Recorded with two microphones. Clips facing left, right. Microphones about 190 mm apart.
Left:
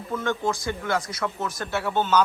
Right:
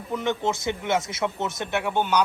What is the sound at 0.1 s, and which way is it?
Speech, 20° right (ahead or behind).